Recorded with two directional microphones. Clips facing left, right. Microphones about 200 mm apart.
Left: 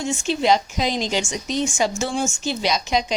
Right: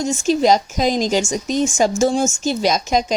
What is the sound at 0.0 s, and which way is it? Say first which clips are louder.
Speech: right 5 dB; 40° right (ahead or behind).